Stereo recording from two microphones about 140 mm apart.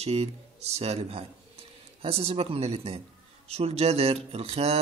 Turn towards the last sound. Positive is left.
turn(degrees=-45)  # may be behind; listen again after turning